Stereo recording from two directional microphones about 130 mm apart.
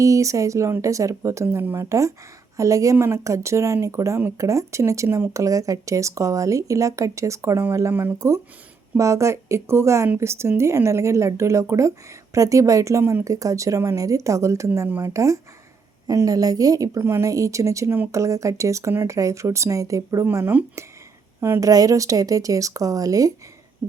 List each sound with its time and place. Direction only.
0.0 s speech: 25° right (ahead or behind)
20.2 s speech: 15° right (ahead or behind)